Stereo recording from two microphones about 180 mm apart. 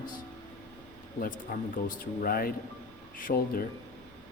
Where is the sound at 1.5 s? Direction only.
50° left (ahead or behind).